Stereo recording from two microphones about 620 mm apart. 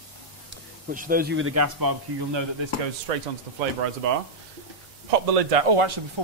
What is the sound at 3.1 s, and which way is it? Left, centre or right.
Speech, right.